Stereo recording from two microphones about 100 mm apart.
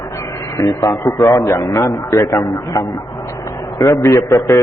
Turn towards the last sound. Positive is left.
turn(degrees=35)  # may be behind; listen again after turning